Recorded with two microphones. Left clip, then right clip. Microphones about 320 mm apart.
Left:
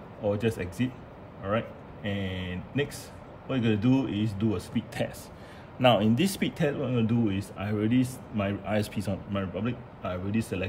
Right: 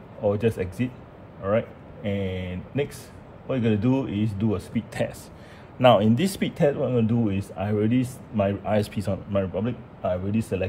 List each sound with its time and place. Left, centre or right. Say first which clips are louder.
0.2 s speech: right 5 dB; centre
2.0 s speech: right 5 dB; centre